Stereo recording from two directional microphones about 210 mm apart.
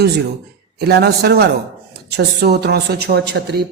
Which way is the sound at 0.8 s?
50° right (ahead or behind).